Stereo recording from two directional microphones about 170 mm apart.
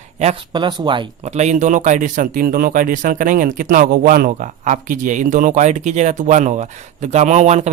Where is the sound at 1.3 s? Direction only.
45° right (ahead or behind).